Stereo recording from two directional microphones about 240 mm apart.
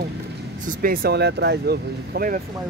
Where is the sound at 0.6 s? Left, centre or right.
Right.